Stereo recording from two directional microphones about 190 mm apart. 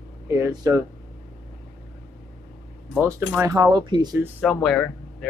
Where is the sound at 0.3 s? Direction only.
15° right (ahead or behind).